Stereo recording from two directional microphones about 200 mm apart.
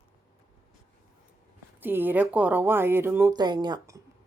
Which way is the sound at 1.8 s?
10° right (ahead or behind).